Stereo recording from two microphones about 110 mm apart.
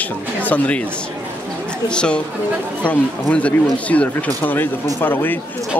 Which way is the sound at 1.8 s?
10° left (ahead or behind).